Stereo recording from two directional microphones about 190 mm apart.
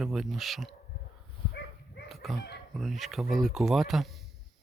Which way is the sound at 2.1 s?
Centre (ahead or behind).